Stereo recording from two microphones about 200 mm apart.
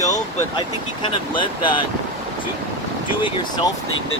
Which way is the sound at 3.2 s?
25° left (ahead or behind).